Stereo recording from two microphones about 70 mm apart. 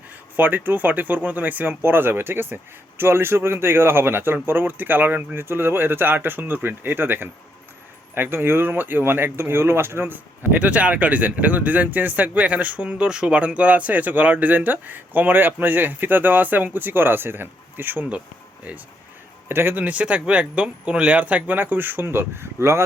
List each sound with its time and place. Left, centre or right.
0.3 s speech: right
10.6 s speech: centre
19.5 s speech: right